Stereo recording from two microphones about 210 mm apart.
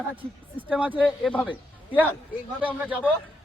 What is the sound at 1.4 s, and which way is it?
A man's voice, 5° right (ahead or behind).